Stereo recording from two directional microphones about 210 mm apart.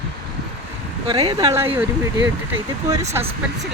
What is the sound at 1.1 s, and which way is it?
Speech, 20° right (ahead or behind).